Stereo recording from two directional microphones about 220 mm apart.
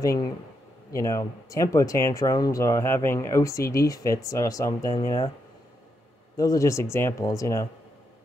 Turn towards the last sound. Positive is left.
turn(degrees=15)  # may be behind; listen again after turning